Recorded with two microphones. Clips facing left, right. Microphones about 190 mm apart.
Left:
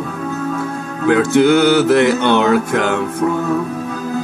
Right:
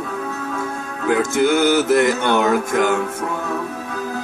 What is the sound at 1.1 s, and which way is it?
Mantra, 75° left (ahead or behind).